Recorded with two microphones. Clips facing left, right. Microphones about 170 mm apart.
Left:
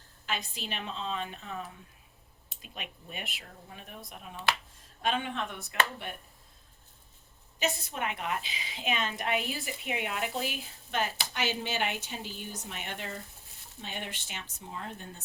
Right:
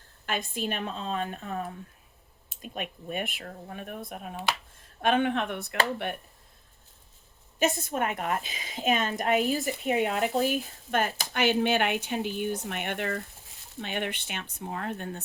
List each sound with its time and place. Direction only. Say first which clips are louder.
0.3 s a woman's voice: right 6 dB; 50° right (ahead or behind)
7.6 s a woman's voice: right 6 dB; 50° right (ahead or behind)